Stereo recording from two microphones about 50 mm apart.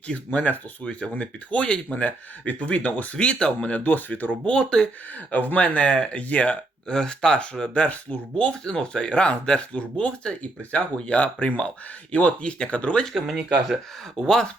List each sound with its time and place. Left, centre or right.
0.3 s speech: left
3.7 s speech: left
4.4 s speech: centre
5.3 s speech: left
13.1 s speech: centre
14.2 s speech: centre